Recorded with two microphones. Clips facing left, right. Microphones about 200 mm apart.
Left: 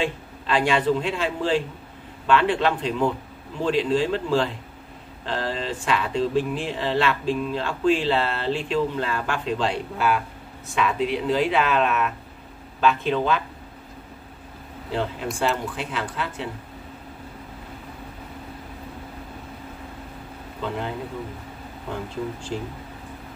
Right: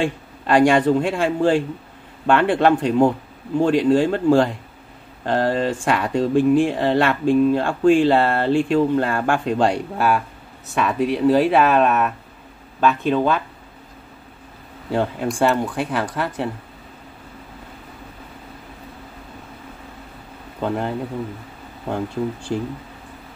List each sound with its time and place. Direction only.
0.0 s speech: 50° right (ahead or behind)
14.9 s speech: 50° right (ahead or behind)
20.6 s speech: 50° right (ahead or behind)